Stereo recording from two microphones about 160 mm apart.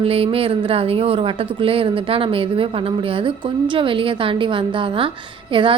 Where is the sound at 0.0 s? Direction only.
35° right (ahead or behind).